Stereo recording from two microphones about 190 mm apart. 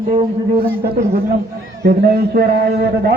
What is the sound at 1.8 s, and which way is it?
Speech, 55° right (ahead or behind).